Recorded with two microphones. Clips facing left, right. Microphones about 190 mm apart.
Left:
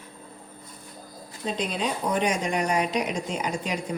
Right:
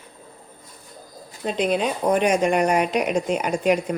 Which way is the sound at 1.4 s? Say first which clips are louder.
Right 6 dB; 60° right (ahead or behind).